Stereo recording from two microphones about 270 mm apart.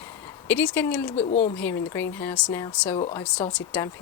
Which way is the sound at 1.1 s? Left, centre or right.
Left.